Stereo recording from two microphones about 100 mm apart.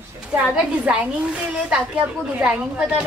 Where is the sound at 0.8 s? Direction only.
10° right (ahead or behind).